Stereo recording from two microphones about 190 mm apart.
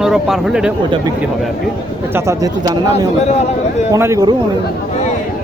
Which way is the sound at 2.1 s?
15° right (ahead or behind).